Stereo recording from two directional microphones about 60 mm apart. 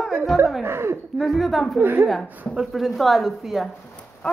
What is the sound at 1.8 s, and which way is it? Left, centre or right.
Speech, right.